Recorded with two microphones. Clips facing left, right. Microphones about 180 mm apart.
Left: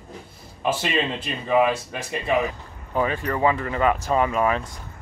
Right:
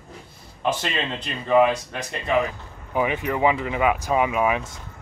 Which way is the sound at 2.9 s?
15° right (ahead or behind).